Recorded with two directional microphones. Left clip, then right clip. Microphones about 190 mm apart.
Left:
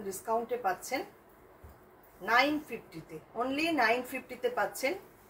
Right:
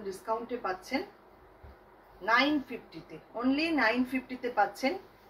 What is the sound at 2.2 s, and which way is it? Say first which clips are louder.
A woman's voice: right 1 dB; 15° left (ahead or behind).